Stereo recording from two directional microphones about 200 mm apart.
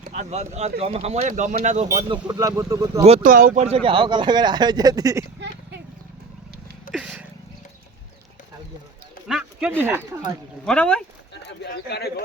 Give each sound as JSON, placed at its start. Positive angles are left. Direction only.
{"t": 0.1, "sound": "speech", "side_deg": -35}
{"t": 1.9, "sound": "speech", "side_deg": -20}
{"t": 3.0, "sound": "speech", "side_deg": -30}
{"t": 3.8, "sound": "speech", "side_deg": -25}
{"t": 6.9, "sound": "a sound", "side_deg": -5}
{"t": 9.2, "sound": "speech", "side_deg": -5}
{"t": 10.7, "sound": "speech", "side_deg": 5}
{"t": 11.4, "sound": "a man's voice", "side_deg": 55}